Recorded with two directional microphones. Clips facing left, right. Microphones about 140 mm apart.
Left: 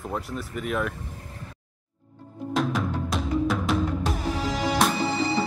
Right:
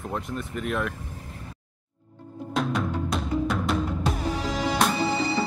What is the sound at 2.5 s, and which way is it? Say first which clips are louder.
Music: left 1 dB; centre (ahead or behind).